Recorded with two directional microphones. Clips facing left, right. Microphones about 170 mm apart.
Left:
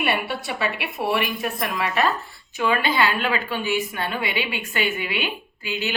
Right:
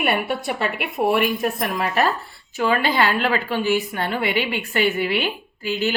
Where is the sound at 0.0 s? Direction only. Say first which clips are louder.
Right 3 dB; 50° right (ahead or behind).